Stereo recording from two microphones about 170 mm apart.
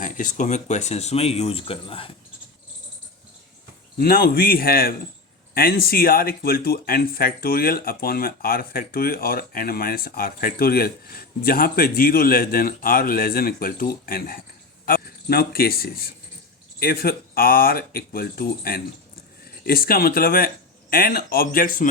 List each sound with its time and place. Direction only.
0.0 s speech: 50° left (ahead or behind); by 2.0 s 30° left (ahead or behind)
3.9 s speech: 65° left (ahead or behind)